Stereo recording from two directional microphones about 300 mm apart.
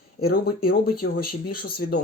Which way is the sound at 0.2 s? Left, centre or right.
Left.